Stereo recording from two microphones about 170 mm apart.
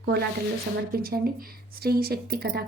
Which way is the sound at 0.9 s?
60° right (ahead or behind).